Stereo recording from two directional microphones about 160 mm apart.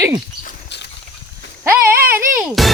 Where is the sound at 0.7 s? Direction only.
90° left.